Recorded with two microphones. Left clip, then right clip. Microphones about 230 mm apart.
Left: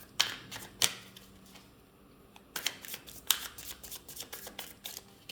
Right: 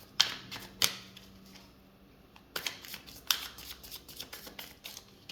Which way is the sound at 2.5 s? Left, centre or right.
Centre.